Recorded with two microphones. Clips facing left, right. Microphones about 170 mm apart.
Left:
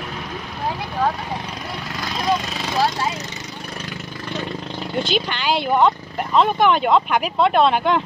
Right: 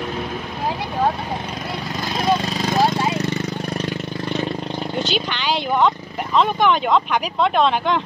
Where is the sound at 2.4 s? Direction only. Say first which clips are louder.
Right 5 dB; 40° right (ahead or behind).